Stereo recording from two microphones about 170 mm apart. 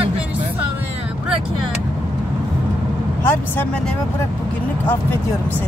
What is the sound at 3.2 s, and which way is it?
Speech, 10° left (ahead or behind).